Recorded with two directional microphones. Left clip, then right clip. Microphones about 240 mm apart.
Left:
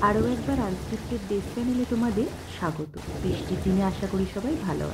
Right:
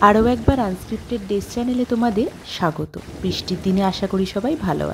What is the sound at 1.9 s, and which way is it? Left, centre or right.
A woman's voice, right.